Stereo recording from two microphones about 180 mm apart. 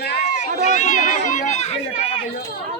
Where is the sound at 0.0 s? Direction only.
65° left (ahead or behind).